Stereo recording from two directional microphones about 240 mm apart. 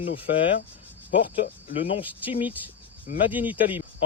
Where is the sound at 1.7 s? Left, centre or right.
Left.